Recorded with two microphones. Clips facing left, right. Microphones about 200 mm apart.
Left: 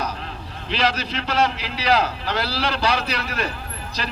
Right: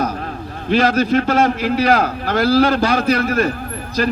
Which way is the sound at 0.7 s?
50° right (ahead or behind).